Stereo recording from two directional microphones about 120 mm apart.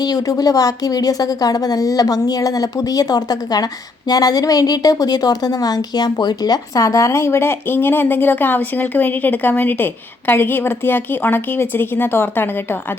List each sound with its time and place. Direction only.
0.0 s a woman's voice: 30° left (ahead or behind)